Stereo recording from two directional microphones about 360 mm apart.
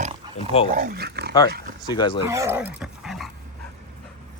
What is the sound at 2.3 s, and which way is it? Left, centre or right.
Speech, centre.